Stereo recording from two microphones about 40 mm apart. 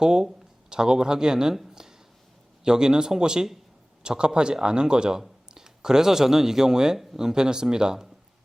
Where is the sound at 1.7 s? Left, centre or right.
Centre.